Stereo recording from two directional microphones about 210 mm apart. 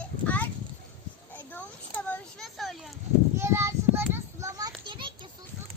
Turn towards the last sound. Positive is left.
turn(degrees=-20)  # may be behind; listen again after turning